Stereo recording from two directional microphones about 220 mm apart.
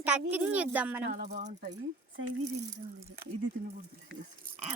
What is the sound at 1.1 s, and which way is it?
Speech, 35° right (ahead or behind).